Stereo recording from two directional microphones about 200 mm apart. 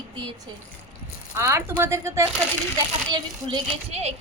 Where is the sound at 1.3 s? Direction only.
10° right (ahead or behind).